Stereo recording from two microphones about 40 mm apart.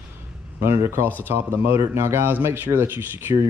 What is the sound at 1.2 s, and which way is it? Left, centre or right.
Speech, right.